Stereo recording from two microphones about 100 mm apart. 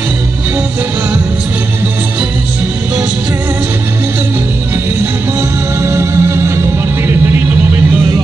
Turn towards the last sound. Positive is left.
turn(degrees=-25)  # may be behind; listen again after turning